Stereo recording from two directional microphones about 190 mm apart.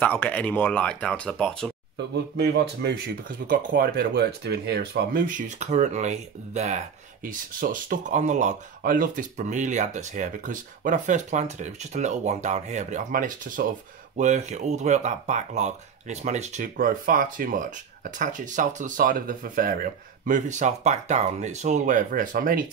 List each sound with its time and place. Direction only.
0.0 s speech: 10° left (ahead or behind)
2.1 s speech: 60° right (ahead or behind)